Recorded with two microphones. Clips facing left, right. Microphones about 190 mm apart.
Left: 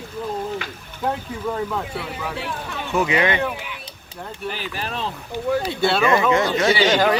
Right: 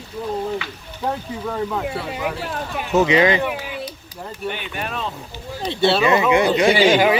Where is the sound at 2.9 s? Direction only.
25° right (ahead or behind).